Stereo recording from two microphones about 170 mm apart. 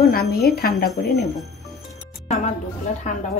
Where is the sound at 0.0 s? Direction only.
65° left (ahead or behind).